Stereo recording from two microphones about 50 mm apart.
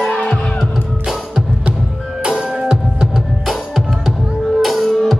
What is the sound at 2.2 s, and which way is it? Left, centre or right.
Music, centre.